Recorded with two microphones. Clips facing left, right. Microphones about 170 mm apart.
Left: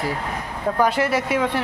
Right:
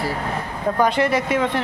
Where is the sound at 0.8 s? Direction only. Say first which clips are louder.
Right 1 dB; 5° left (ahead or behind).